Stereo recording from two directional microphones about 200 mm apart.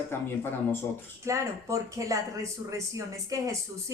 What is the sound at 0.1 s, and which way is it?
Speech, 10° left (ahead or behind).